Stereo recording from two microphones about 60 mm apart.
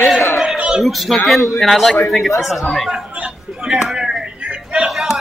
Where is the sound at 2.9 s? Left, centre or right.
Centre.